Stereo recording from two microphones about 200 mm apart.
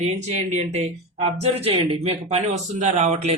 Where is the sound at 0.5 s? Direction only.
35° right (ahead or behind).